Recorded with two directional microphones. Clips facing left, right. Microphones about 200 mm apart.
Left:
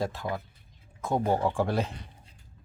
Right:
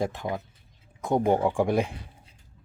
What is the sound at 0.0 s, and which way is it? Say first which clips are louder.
Speech: right 2 dB; 15° right (ahead or behind).